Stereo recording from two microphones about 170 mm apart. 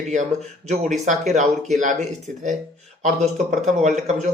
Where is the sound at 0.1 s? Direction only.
45° right (ahead or behind).